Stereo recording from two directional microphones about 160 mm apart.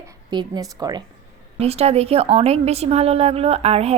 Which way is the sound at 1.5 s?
40° right (ahead or behind).